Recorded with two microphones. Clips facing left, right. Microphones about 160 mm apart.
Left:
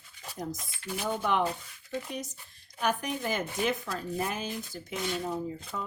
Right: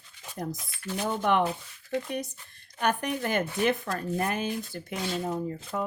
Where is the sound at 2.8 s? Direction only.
60° right (ahead or behind).